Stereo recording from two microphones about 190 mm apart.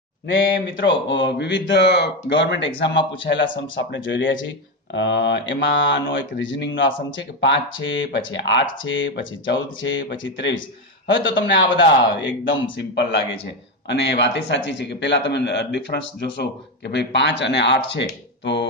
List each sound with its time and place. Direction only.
0.7 s speech: 75° left (ahead or behind)
3.9 s speech: 80° left
13.8 s a man's voice: 65° left (ahead or behind)